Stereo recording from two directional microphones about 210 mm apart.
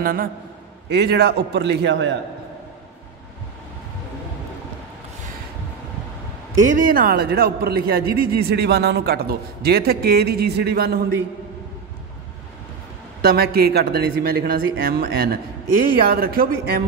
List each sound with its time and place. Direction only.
0.0 s a man's voice: 45° right (ahead or behind)
6.8 s a man's voice: 45° right (ahead or behind)
13.2 s a man's voice: 50° right (ahead or behind)